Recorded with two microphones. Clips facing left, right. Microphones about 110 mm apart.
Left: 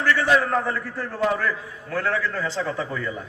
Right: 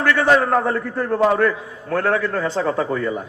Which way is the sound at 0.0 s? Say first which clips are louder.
Right 4 dB; 50° right (ahead or behind).